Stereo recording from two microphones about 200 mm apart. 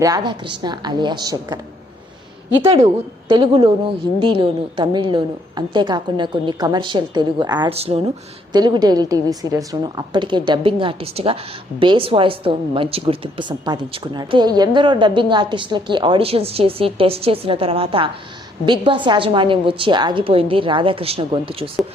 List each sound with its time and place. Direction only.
0.0 s a woman's voice: 20° right (ahead or behind)
2.8 s a woman's voice: 25° right (ahead or behind)